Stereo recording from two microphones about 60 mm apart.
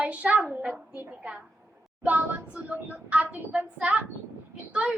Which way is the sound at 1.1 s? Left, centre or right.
Centre.